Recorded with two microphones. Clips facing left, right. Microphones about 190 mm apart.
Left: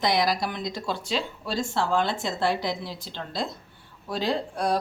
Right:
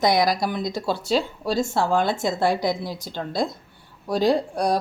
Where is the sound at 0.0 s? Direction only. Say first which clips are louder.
Right 4 dB; 40° right (ahead or behind).